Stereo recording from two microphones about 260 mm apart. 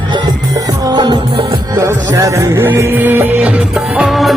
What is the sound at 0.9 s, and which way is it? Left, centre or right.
Music, centre.